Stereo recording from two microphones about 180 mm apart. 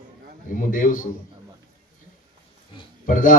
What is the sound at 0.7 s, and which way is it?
Speech, 50° left (ahead or behind).